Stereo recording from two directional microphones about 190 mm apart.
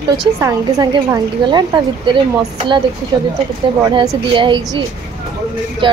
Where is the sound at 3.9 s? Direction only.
20° right (ahead or behind).